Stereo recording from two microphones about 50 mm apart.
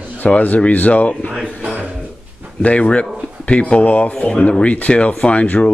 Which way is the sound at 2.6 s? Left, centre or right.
Left.